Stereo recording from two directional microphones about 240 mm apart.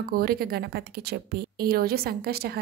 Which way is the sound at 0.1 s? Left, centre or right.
Right.